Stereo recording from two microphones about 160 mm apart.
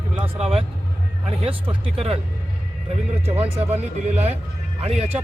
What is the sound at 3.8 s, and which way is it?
Speech, 45° right (ahead or behind).